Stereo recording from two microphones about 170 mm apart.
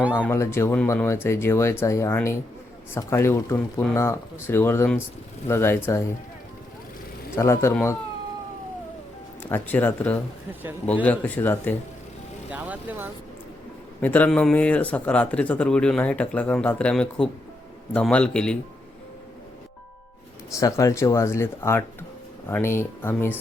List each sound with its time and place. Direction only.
0.3 s speech: 15° left (ahead or behind)
7.3 s speech: 15° left (ahead or behind)
9.4 s speech: 10° left (ahead or behind)
12.5 s speech: 10° right (ahead or behind)
14.0 s a man's voice: 10° left (ahead or behind)
20.6 s speech: 20° left (ahead or behind)